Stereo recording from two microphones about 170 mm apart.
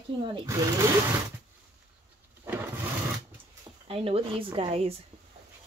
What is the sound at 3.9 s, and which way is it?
Speech, 35° right (ahead or behind).